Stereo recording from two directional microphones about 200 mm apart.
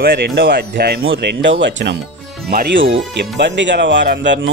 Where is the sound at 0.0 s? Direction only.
50° right (ahead or behind).